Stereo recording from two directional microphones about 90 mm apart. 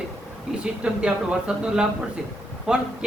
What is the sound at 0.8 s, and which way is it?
A man's voice, 10° right (ahead or behind).